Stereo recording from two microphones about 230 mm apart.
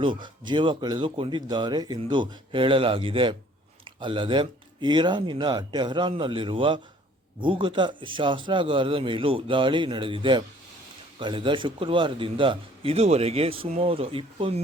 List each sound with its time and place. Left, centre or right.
0.0 s a man's voice: right